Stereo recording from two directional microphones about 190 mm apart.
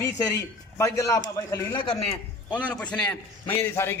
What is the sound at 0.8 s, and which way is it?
A man's voice, 15° left (ahead or behind).